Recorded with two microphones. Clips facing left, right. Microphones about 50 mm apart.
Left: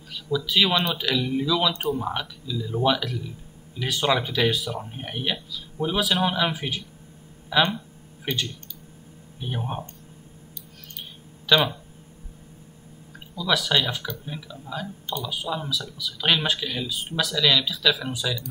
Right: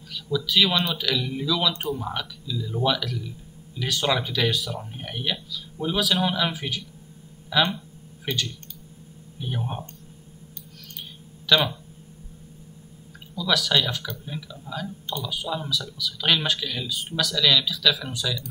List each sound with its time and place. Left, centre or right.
0.1 s speech: centre
11.4 s speech: centre
13.4 s speech: centre